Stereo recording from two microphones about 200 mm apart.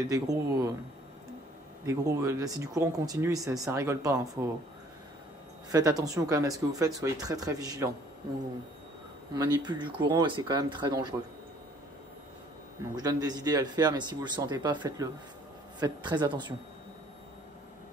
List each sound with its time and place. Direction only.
0.1 s speech: 15° right (ahead or behind)
1.9 s speech: 15° right (ahead or behind)
5.7 s speech: 15° right (ahead or behind)
9.3 s speech: 20° right (ahead or behind)
12.9 s speech: 20° right (ahead or behind)